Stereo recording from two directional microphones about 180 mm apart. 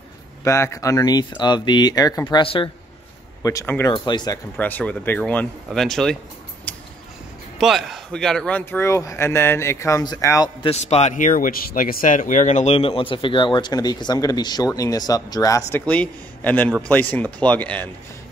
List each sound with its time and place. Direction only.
0.4 s speech: 15° left (ahead or behind)
3.4 s speech: 15° left (ahead or behind)
4.6 s speech: 10° left (ahead or behind)
7.5 s speech: centre (ahead or behind); by 10.5 s 20° left (ahead or behind)
10.6 s speech: 35° left (ahead or behind); by 15.8 s 20° left (ahead or behind)
15.8 s speech: 5° left (ahead or behind)